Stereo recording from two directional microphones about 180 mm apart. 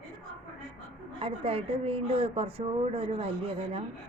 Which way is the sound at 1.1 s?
30° right (ahead or behind).